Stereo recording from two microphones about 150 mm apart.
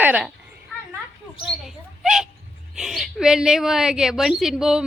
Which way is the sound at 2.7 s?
Centre (ahead or behind).